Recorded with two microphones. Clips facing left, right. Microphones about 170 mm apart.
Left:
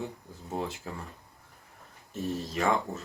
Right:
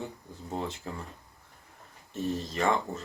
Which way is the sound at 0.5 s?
5° left (ahead or behind).